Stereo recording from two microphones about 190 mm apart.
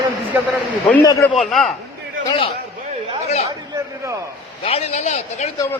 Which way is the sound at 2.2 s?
30° left (ahead or behind).